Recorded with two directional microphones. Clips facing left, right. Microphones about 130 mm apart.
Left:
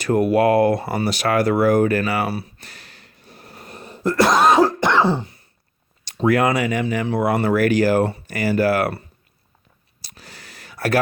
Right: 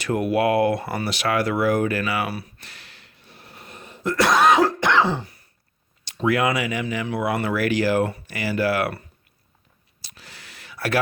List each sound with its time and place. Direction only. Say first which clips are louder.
0.0 s speech: left 4 dB; 40° left (ahead or behind)
6.1 s speech: left 4 dB; 45° left (ahead or behind)
10.0 s a sound: left 3 dB; 40° left (ahead or behind)